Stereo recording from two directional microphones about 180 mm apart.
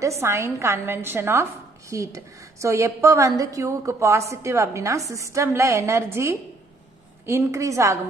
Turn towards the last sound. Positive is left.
turn(degrees=-15)  # may be behind; listen again after turning